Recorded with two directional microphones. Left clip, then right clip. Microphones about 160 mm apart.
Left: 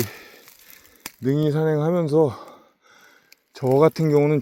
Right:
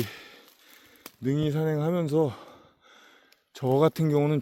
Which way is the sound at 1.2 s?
15° right (ahead or behind).